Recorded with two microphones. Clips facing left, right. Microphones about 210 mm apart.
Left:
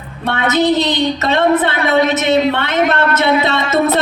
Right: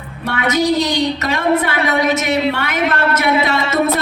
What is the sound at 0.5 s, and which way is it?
A woman's voice, 25° left (ahead or behind).